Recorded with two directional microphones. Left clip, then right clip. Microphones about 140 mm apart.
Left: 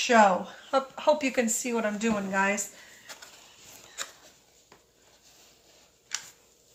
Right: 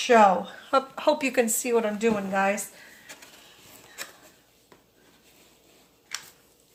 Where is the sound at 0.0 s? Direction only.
30° right (ahead or behind).